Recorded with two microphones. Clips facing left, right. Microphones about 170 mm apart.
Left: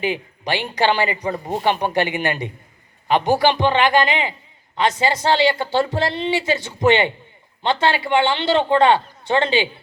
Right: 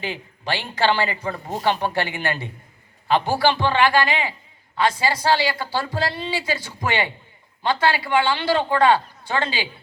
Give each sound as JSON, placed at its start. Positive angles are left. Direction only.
{"t": 0.0, "sound": "a man's voice", "side_deg": 15}